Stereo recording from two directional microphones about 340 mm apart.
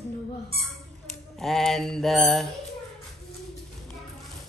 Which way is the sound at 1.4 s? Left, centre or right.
Centre.